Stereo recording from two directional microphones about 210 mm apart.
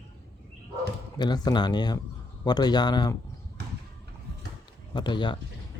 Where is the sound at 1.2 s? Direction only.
20° left (ahead or behind).